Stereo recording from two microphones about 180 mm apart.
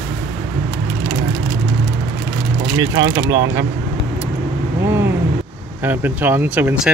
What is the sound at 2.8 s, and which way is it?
Speech, 20° right (ahead or behind).